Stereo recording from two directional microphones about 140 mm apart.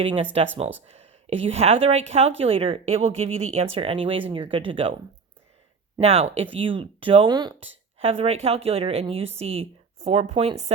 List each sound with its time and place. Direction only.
0.0 s a woman's voice: 40° right (ahead or behind)
6.0 s speech: 45° right (ahead or behind); by 7.7 s 30° right (ahead or behind)
7.9 s a woman's voice: 45° right (ahead or behind)